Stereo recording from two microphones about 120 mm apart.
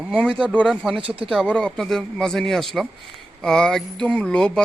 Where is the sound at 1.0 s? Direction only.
50° right (ahead or behind).